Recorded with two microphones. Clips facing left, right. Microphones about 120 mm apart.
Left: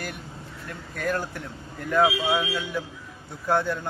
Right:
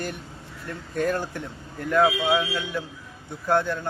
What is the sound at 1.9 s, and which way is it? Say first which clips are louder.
Speech: right 1 dB; centre (ahead or behind).